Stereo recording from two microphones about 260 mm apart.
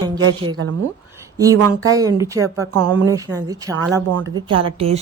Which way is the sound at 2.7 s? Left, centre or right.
Right.